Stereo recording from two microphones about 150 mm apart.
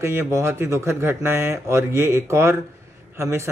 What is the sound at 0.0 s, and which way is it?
Speech, 15° right (ahead or behind).